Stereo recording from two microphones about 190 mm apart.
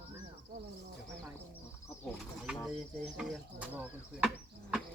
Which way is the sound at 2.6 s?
Centre (ahead or behind).